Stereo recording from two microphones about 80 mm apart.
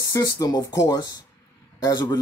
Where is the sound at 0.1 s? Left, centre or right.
Left.